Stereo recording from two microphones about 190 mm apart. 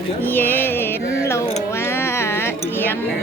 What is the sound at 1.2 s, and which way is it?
Music, 15° left (ahead or behind).